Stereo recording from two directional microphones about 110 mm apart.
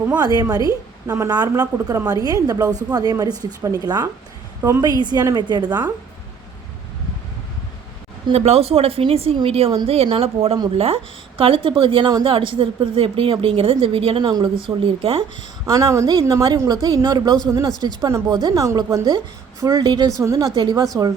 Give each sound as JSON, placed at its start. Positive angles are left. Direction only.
{"t": 0.2, "sound": "a woman's voice", "side_deg": -35}
{"t": 8.3, "sound": "a woman's voice", "side_deg": -65}
{"t": 15.6, "sound": "a woman's voice", "side_deg": -35}